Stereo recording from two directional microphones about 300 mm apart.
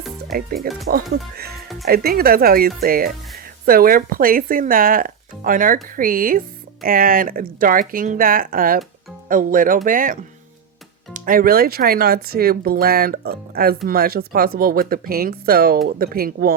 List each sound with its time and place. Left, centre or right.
0.3 s speech: right
1.9 s speech: right